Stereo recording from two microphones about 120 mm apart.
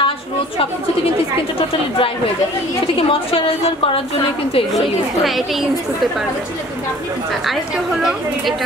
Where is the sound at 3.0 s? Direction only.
50° left (ahead or behind).